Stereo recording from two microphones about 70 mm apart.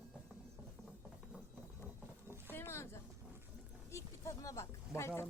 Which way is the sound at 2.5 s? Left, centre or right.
Left.